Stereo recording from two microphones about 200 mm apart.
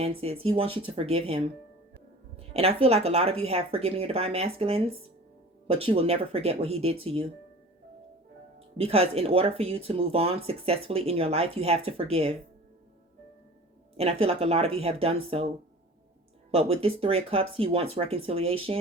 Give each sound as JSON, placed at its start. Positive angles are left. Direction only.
{"t": 0.0, "sound": "speech", "side_deg": -30}
{"t": 8.5, "sound": "speech", "side_deg": -30}
{"t": 13.9, "sound": "speech", "side_deg": -30}